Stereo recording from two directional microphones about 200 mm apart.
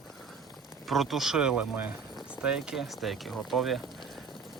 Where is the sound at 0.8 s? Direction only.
Centre (ahead or behind).